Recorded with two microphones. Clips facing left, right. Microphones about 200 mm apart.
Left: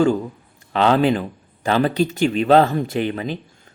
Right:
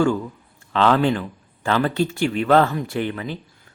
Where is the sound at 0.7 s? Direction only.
15° left (ahead or behind).